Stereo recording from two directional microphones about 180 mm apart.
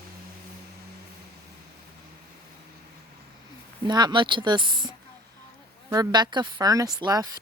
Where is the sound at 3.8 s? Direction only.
25° right (ahead or behind).